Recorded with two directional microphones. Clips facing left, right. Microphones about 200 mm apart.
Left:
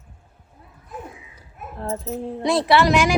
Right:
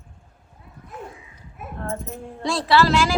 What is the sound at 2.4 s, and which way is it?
Speech, 20° left (ahead or behind).